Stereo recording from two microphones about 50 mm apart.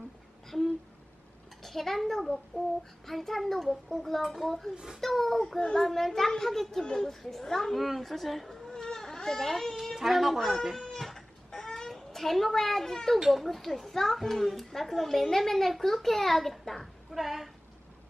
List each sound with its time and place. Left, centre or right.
0.5 s a sound: centre
1.6 s a child's voice: centre
5.6 s a child's voice: centre
5.9 s a child's voice: centre
9.9 s a sound: centre
13.3 s a child's voice: centre